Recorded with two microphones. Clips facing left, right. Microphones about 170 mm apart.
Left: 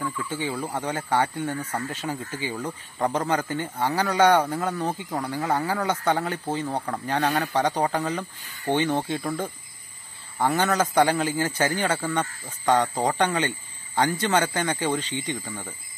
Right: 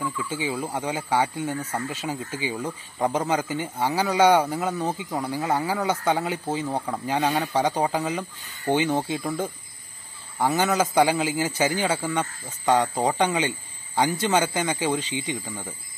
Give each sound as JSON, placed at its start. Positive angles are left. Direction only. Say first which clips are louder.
{"t": 0.0, "sound": "a man's voice", "louder": "right 1 dB", "side_deg": -10}